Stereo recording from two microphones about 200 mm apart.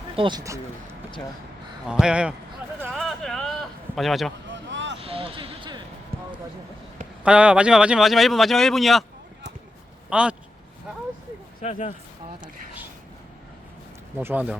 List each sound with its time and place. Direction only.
0.2 s speech: 20° right (ahead or behind)
1.9 s speech: 5° right (ahead or behind)
2.9 s a sound: centre (ahead or behind)
4.5 s basketball bounce: 65° right (ahead or behind)
4.9 s basketball bounce: 30° right (ahead or behind)
7.3 s speech: 5° right (ahead or behind)
10.1 s speech: 5° right (ahead or behind)
11.6 s speech: 35° left (ahead or behind)
14.2 s speech: 10° right (ahead or behind)